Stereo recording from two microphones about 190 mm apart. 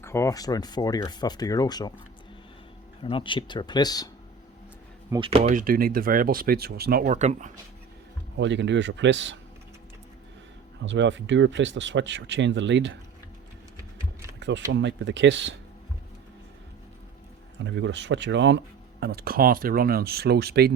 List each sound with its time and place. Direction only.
0.0 s speech: 15° left (ahead or behind)
3.0 s speech: 25° left (ahead or behind)
5.1 s speech: 30° right (ahead or behind)
8.4 s speech: 70° right (ahead or behind)
10.8 s speech: 75° right (ahead or behind)
13.7 s a sound: 15° right (ahead or behind)
14.3 s a sound: 65° right (ahead or behind)
14.7 s speech: 70° right (ahead or behind)
17.6 s speech: 70° right (ahead or behind)